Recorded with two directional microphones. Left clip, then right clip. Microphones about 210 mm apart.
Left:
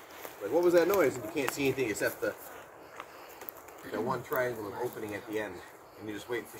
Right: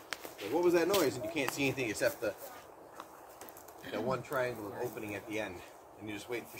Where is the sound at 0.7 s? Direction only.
20° left (ahead or behind).